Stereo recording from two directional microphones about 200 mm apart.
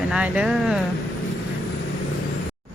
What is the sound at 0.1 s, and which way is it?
Speech, 5° right (ahead or behind).